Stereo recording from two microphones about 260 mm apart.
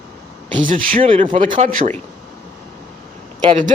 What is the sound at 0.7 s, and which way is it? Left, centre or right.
Speech, right.